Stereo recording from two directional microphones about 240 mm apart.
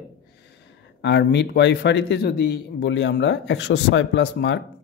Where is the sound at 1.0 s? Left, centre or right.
Left.